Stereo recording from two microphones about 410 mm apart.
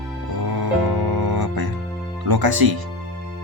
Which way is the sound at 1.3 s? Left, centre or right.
Right.